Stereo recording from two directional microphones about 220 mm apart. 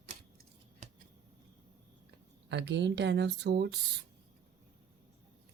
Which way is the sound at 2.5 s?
50° right (ahead or behind).